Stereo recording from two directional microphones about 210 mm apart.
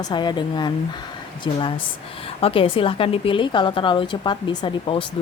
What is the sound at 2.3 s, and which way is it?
A woman's voice, 25° left (ahead or behind).